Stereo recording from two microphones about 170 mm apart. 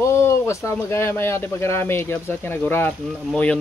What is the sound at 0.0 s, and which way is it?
Speech, 15° left (ahead or behind).